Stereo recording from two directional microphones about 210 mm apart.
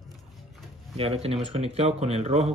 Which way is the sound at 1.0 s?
30° right (ahead or behind).